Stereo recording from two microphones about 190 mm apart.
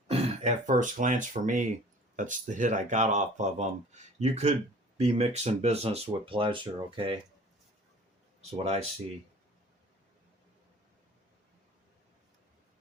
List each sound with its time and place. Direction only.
0.1 s speech: 40° right (ahead or behind)
8.5 s speech: 35° right (ahead or behind)